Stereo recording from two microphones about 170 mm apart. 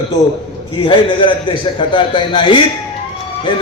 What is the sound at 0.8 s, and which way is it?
A man's voice, 30° left (ahead or behind).